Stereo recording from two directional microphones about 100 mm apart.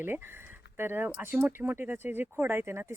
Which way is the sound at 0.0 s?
20° right (ahead or behind).